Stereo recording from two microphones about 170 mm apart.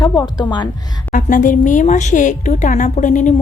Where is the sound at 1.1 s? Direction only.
50° left (ahead or behind).